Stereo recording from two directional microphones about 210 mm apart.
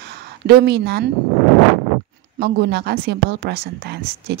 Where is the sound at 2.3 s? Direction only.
50° right (ahead or behind).